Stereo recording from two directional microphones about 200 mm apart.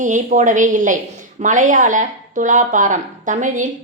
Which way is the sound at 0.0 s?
40° right (ahead or behind).